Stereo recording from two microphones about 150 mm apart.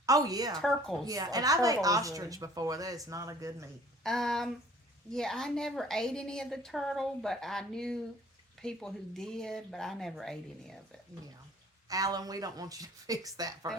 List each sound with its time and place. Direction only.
0.0 s a woman's voice: 25° right (ahead or behind)
0.6 s a woman's voice: centre (ahead or behind)
1.0 s a woman's voice: 25° right (ahead or behind)
4.0 s a woman's voice: 5° left (ahead or behind)
11.9 s a woman's voice: 25° right (ahead or behind)